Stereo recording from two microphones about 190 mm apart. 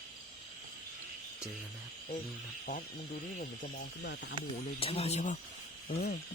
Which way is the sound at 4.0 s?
65° left (ahead or behind).